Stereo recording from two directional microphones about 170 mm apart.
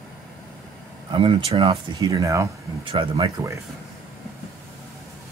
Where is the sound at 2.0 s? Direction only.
20° right (ahead or behind).